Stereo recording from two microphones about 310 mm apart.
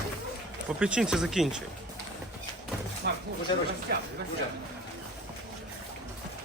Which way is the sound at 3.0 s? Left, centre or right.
Right.